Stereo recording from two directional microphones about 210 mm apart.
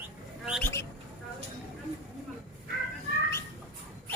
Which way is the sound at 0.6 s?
15° left (ahead or behind).